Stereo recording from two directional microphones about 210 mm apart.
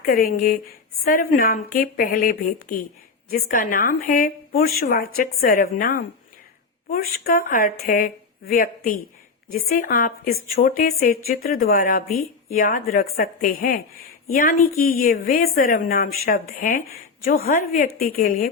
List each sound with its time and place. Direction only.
0.0 s a woman's voice: 45° left (ahead or behind)